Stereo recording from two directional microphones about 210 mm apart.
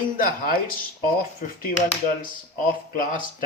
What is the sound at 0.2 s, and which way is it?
Speech, 40° left (ahead or behind).